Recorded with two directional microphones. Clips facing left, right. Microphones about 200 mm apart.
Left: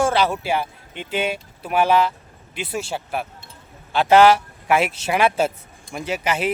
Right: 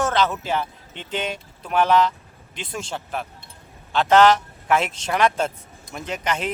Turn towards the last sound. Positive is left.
turn(degrees=5)  # may be behind; listen again after turning